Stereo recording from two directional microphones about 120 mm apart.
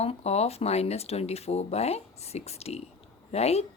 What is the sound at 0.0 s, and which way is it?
A woman's voice, 60° left (ahead or behind).